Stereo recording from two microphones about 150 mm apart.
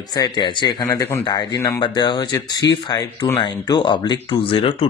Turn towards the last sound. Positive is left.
turn(degrees=35)  # may be behind; listen again after turning